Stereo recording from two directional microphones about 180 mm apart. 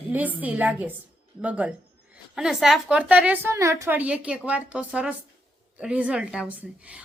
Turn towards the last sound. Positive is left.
turn(degrees=-5)  # may be behind; listen again after turning